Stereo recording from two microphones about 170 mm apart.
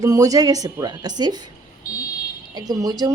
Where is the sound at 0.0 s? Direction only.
20° right (ahead or behind).